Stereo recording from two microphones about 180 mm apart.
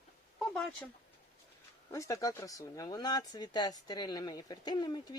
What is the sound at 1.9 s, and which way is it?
Speech, 15° left (ahead or behind).